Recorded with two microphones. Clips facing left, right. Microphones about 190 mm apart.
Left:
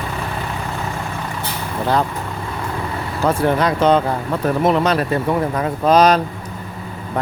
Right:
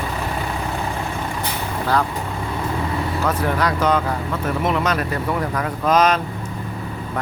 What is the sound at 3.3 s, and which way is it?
Speech, 30° left (ahead or behind).